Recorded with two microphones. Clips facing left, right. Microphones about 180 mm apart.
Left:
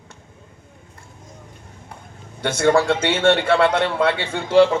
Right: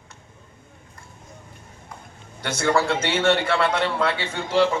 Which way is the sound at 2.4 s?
60° left (ahead or behind).